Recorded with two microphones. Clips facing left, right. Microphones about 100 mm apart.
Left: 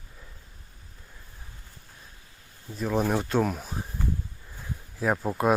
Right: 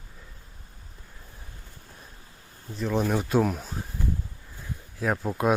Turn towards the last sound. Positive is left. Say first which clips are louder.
# left 1 dB
turn(degrees=0)  # may be behind; listen again after turning